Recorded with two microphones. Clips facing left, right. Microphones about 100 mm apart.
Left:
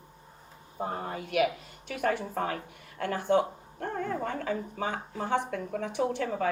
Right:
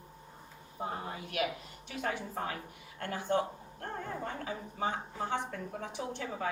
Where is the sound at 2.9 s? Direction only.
90° left.